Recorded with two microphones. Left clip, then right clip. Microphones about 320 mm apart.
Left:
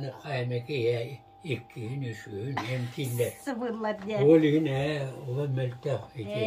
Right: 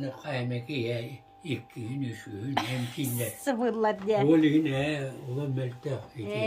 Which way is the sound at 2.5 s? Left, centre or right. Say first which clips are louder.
Right 4 dB; right.